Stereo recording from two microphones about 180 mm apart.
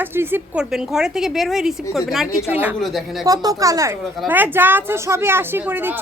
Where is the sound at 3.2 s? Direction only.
20° right (ahead or behind).